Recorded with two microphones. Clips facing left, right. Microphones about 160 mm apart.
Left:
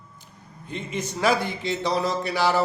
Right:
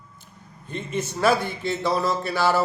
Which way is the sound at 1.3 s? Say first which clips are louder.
Right 1 dB; 15° left (ahead or behind).